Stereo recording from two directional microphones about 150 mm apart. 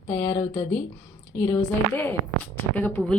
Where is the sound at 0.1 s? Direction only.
20° left (ahead or behind).